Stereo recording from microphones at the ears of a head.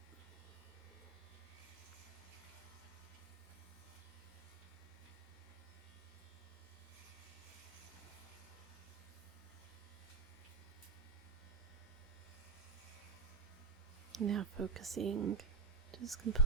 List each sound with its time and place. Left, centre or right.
14.2 s speech: right